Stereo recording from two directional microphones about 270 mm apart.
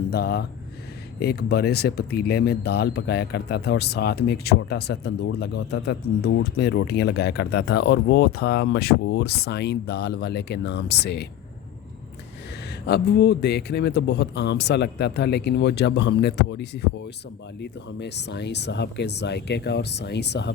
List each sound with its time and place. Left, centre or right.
0.1 s speech: left
12.8 s speech: left